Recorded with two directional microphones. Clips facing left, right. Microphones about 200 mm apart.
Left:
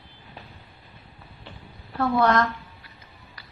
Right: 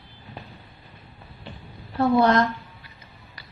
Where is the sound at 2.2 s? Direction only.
20° right (ahead or behind).